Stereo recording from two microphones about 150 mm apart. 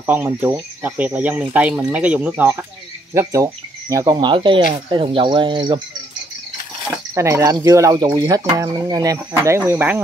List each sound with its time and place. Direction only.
0.0 s speech: 10° right (ahead or behind); by 5.8 s 30° right (ahead or behind)
7.2 s speech: 20° right (ahead or behind)